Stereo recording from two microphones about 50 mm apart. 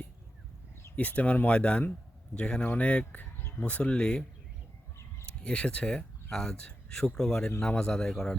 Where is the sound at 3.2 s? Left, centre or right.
Left.